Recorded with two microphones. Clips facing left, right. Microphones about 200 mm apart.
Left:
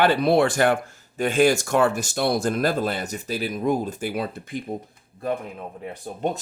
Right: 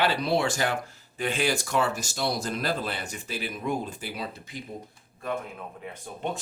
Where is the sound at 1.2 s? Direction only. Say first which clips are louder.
Left 8 dB; 45° left (ahead or behind).